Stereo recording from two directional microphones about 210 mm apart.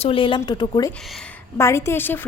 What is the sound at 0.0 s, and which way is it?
A woman's voice, 25° left (ahead or behind).